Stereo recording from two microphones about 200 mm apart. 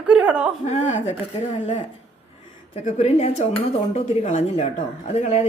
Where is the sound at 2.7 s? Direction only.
35° left (ahead or behind).